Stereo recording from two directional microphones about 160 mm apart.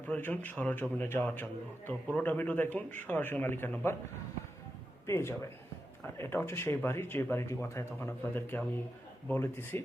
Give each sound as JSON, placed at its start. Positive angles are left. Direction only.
{"t": 0.1, "sound": "speech", "side_deg": 10}
{"t": 5.0, "sound": "speech", "side_deg": 15}